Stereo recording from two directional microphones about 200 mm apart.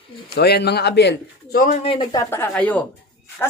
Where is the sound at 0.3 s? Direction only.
55° left (ahead or behind).